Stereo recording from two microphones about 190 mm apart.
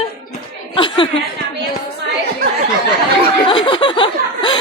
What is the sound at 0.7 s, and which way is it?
Chuckle, 25° left (ahead or behind).